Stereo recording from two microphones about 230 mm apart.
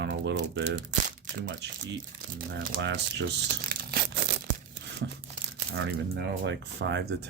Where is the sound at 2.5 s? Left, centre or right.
Right.